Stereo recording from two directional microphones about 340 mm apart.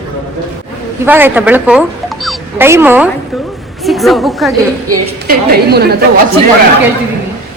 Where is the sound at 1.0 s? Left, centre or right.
Centre.